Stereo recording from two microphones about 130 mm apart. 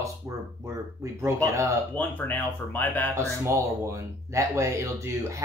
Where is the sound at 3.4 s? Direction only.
25° right (ahead or behind).